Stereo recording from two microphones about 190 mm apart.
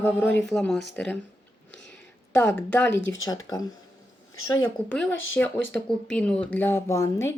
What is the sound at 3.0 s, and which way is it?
Speech, 75° left (ahead or behind).